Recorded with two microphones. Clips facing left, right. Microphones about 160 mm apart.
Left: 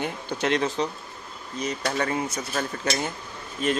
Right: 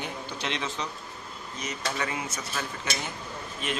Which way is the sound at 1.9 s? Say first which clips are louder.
Left 6 dB; 40° left (ahead or behind).